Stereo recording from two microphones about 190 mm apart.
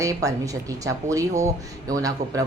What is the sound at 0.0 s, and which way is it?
Speech, 20° right (ahead or behind).